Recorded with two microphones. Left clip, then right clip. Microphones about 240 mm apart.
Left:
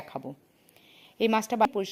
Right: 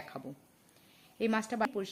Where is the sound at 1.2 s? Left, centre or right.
Centre.